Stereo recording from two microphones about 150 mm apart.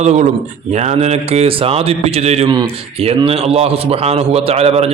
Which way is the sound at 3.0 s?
40° right (ahead or behind).